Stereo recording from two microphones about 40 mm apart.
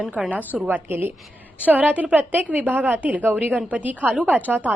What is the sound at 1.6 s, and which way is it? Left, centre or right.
A woman's voice, right.